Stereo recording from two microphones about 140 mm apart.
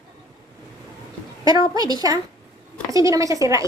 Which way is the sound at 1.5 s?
25° right (ahead or behind).